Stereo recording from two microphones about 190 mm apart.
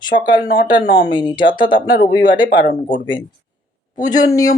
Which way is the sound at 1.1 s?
25° left (ahead or behind).